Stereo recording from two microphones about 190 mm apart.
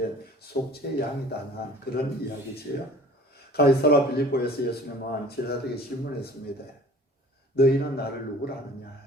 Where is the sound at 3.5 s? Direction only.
55° left (ahead or behind).